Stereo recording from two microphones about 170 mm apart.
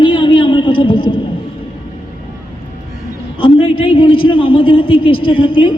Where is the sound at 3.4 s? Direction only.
30° left (ahead or behind).